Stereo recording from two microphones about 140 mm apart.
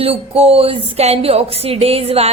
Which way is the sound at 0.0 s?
45° right (ahead or behind).